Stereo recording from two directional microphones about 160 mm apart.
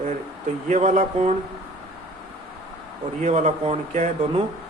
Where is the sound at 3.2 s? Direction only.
45° right (ahead or behind).